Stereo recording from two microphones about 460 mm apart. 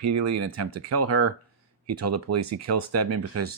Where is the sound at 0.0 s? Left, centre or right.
Right.